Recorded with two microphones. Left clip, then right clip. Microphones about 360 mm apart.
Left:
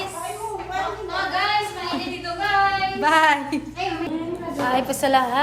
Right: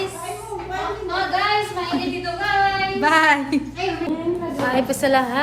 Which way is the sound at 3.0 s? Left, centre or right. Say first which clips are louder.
Right 1 dB; centre.